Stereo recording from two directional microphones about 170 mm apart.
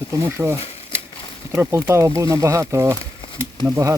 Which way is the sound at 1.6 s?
15° right (ahead or behind).